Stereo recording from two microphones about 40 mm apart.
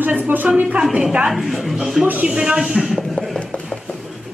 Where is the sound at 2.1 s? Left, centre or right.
Right.